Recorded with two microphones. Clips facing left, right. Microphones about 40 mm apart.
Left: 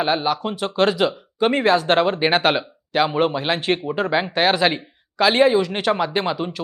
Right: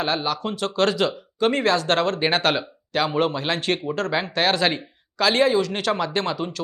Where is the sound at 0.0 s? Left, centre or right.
Centre.